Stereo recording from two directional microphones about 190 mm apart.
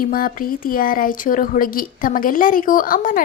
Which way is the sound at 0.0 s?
50° left (ahead or behind).